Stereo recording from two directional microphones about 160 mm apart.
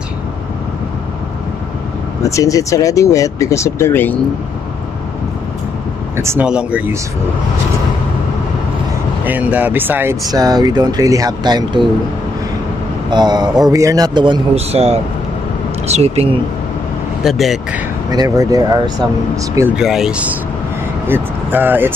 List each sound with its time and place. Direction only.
2.2 s speech: 20° left (ahead or behind)
6.1 s speech: 15° right (ahead or behind)
6.4 s speech: 5° right (ahead or behind)
9.2 s speech: 10° right (ahead or behind)
10.3 s a man's voice: 25° right (ahead or behind)
13.1 s a man's voice: 25° right (ahead or behind); by 16.3 s 40° right (ahead or behind)
17.2 s speech: centre (ahead or behind)
18.1 s a man's voice: 25° right (ahead or behind)
19.7 s speech: 5° right (ahead or behind)